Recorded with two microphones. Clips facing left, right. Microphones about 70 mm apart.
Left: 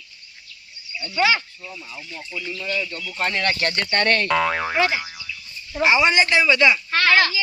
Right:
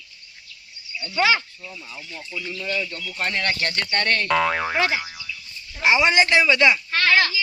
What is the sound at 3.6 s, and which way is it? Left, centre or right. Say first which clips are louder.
Speech: left 3 dB; left.